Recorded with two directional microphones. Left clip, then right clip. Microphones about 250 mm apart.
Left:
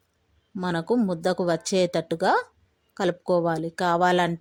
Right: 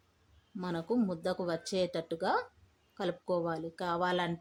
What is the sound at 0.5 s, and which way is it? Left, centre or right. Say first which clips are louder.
Speech: left 9 dB; left.